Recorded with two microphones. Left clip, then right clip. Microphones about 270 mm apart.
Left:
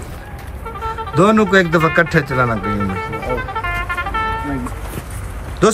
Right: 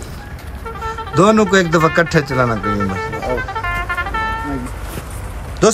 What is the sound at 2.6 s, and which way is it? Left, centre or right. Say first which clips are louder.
Music: right 2 dB; right.